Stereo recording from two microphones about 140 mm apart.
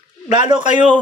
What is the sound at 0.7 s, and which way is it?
Speech, 35° right (ahead or behind).